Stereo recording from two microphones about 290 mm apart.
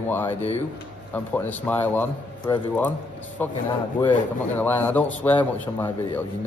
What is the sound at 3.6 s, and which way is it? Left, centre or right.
Speech, centre.